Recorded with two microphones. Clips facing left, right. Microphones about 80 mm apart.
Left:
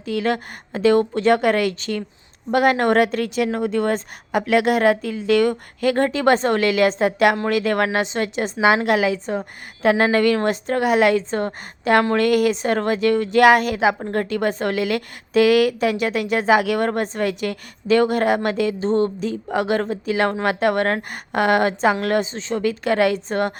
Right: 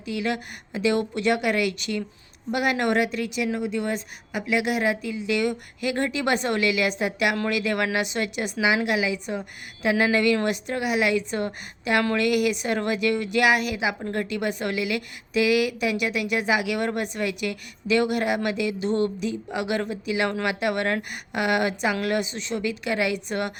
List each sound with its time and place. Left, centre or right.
0.0 s a woman's voice: left
8.6 s a woman's voice: left
9.1 s a woman's voice: left
9.8 s a woman's voice: left
23.1 s a woman's voice: left